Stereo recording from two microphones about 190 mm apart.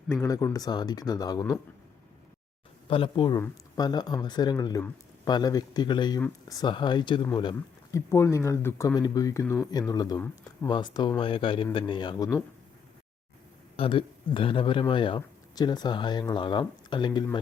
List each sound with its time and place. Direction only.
0.1 s a man's voice: 15° left (ahead or behind)
2.9 s a man's voice: 25° left (ahead or behind)
13.7 s a man's voice: 25° left (ahead or behind)